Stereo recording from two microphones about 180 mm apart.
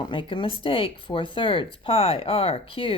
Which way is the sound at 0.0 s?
25° left (ahead or behind).